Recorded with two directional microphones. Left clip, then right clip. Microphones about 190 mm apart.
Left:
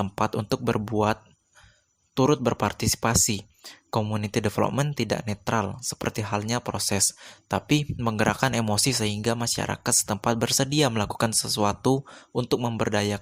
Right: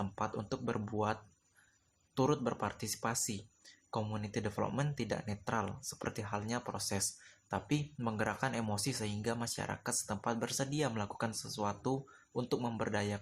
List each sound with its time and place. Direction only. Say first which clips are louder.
0.0 s speech: left 12 dB; 45° left (ahead or behind)